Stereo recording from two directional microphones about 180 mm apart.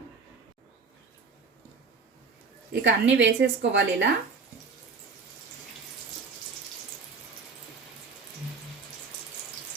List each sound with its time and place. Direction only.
2.7 s a woman's voice: 90° right; by 4.1 s 75° right (ahead or behind)